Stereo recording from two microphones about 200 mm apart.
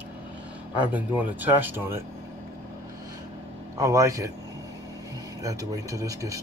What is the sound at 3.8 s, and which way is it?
Speech, 15° right (ahead or behind).